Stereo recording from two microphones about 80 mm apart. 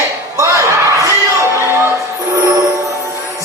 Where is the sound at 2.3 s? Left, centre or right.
Right.